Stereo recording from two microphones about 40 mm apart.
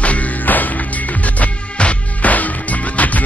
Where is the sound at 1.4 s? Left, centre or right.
Left.